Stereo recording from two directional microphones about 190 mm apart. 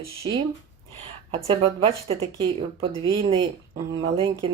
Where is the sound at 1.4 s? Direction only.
30° right (ahead or behind).